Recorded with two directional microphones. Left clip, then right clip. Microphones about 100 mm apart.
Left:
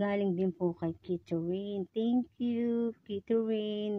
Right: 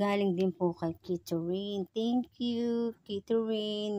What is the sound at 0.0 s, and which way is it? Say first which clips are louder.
A woman's voice: right 2 dB; 25° right (ahead or behind).